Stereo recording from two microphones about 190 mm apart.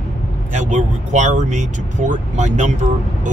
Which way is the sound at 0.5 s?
40° right (ahead or behind).